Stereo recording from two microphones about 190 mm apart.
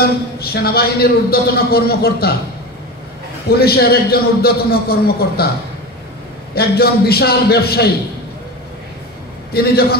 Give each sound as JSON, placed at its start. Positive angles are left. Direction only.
{"t": 0.0, "sound": "a man's voice", "side_deg": 55}
{"t": 3.5, "sound": "a man's voice", "side_deg": 55}
{"t": 6.5, "sound": "a man's voice", "side_deg": 55}
{"t": 9.5, "sound": "a man's voice", "side_deg": 55}